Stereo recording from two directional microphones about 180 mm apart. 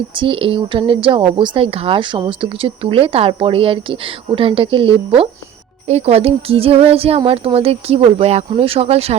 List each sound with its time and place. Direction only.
0.2 s speech: 30° right (ahead or behind)